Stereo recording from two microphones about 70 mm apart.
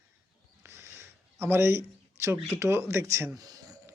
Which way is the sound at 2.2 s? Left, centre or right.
Right.